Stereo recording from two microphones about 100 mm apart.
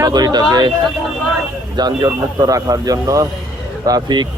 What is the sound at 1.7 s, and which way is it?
A man's voice, 45° right (ahead or behind).